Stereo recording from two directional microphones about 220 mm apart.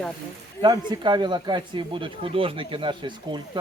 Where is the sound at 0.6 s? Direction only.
20° right (ahead or behind).